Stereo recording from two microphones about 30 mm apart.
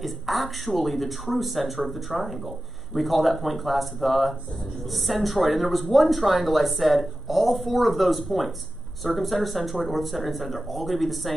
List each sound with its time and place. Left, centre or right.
0.0 s speech: centre